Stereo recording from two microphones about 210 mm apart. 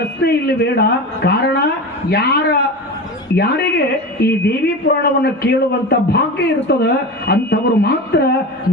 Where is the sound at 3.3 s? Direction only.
50° left (ahead or behind).